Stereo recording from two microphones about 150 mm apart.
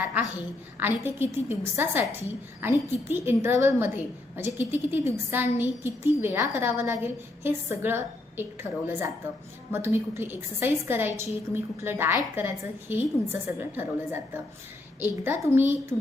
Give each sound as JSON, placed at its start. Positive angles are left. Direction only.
{"t": 0.8, "sound": "a woman's voice", "side_deg": -15}